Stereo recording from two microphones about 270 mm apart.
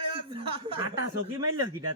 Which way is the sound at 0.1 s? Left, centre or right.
Centre.